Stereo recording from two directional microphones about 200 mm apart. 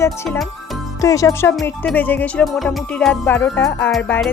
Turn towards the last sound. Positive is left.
turn(degrees=10)  # may be behind; listen again after turning